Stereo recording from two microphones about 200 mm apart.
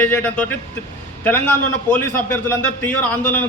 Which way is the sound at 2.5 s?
10° left (ahead or behind).